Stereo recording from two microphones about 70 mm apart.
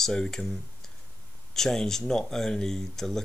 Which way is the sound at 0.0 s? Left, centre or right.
Centre.